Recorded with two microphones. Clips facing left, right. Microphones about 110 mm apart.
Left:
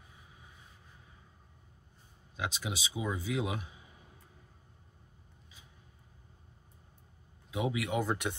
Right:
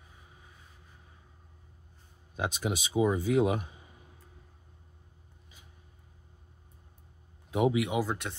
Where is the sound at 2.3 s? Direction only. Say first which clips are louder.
Right 5 dB; 50° right (ahead or behind).